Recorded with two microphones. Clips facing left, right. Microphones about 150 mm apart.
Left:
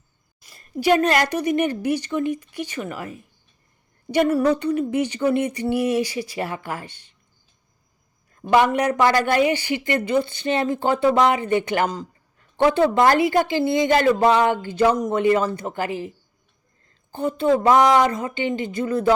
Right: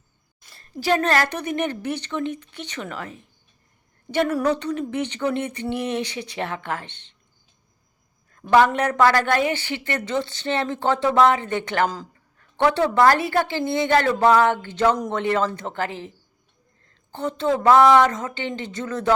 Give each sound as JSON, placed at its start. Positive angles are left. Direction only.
{"t": 1.0, "sound": "speech", "side_deg": 15}
{"t": 8.4, "sound": "speech", "side_deg": 10}
{"t": 17.1, "sound": "speech", "side_deg": 15}